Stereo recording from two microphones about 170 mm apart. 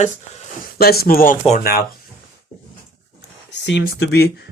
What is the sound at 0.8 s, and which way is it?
Speech, 65° left (ahead or behind).